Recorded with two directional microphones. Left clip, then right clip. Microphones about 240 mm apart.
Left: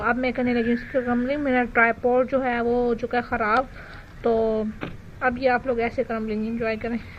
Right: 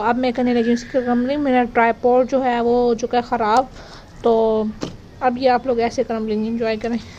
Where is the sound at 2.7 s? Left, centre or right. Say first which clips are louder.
Right 6 dB; centre.